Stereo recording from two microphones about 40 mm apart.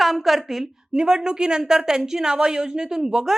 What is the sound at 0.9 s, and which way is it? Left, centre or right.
A woman's voice, centre.